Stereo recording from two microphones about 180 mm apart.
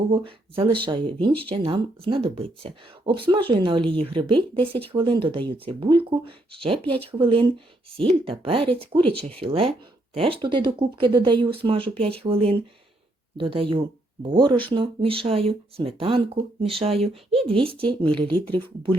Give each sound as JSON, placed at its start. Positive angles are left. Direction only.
{"t": 0.1, "sound": "speech", "side_deg": -30}